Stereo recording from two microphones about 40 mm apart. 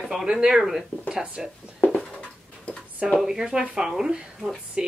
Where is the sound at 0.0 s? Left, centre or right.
Centre.